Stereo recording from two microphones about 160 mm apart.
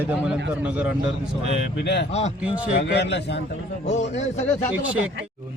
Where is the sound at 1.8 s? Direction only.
90° left.